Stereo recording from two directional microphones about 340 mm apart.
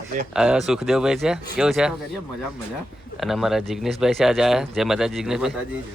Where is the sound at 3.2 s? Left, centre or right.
Centre.